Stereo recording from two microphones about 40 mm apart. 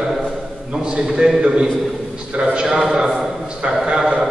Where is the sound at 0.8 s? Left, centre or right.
Right.